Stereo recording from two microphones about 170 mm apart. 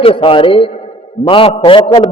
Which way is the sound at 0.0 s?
35° left (ahead or behind).